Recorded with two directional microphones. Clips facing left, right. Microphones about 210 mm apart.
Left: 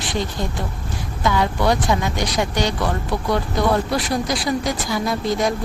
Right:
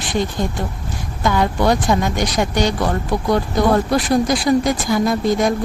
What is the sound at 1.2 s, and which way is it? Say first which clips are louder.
Speech: right 2 dB; 45° right (ahead or behind).